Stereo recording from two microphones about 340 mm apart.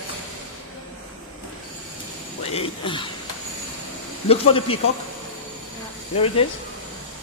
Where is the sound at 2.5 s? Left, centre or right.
Centre.